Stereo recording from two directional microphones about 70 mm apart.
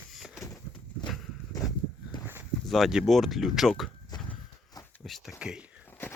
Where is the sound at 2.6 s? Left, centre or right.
Centre.